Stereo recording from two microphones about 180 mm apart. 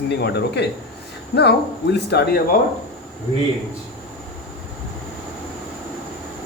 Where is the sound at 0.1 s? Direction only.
65° left (ahead or behind).